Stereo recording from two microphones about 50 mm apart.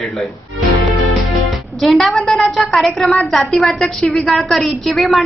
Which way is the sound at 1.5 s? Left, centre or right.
Centre.